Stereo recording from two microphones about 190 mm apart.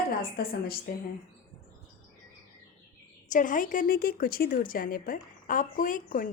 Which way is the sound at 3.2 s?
45° left (ahead or behind).